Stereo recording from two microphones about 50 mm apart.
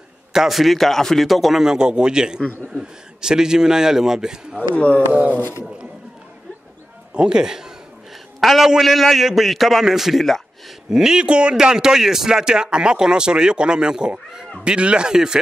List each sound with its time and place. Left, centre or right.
0.3 s a man's voice: centre
4.7 s speech: left
5.1 s a sound: right
7.2 s a man's voice: centre
8.4 s a man's voice: centre